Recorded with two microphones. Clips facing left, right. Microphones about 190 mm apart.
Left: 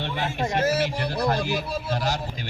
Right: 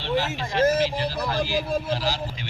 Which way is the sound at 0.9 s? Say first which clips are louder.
Left 2 dB; 60° left (ahead or behind).